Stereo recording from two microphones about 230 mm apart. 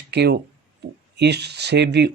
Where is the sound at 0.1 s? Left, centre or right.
Right.